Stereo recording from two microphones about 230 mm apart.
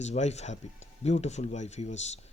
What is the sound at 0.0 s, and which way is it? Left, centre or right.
Speech, left.